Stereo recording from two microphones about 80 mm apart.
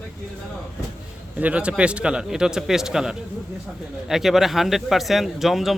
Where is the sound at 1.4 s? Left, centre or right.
Centre.